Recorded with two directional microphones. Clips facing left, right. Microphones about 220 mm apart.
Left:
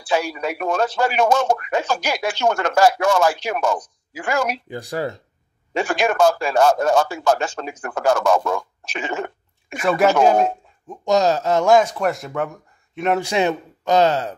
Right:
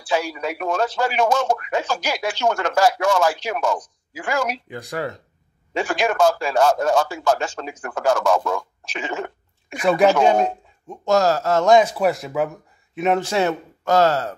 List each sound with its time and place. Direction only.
0.1 s speech: 55° left (ahead or behind)
4.6 s speech: 30° left (ahead or behind)
5.7 s a man's voice: 55° left (ahead or behind)
9.8 s speech: centre (ahead or behind)
11.1 s speech: 20° left (ahead or behind)
11.6 s a man's voice: centre (ahead or behind)
13.2 s speech: 15° left (ahead or behind)